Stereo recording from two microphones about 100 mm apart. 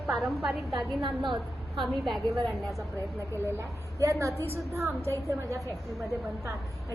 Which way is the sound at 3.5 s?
25° right (ahead or behind).